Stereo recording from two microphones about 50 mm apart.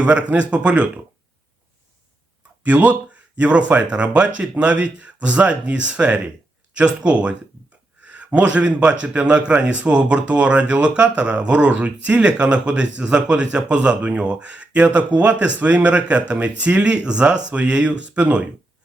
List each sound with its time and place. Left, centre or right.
0.0 s a man's voice: right
2.6 s a man's voice: right